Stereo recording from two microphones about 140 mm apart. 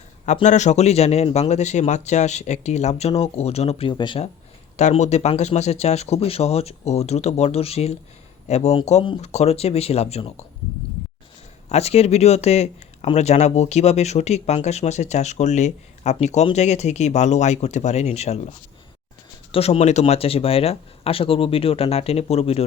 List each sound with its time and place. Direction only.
0.4 s speech: 55° left (ahead or behind); by 4.2 s 35° left (ahead or behind)
4.8 s speech: 55° left (ahead or behind)
11.7 s speech: 50° left (ahead or behind)
19.5 s speech: 45° left (ahead or behind)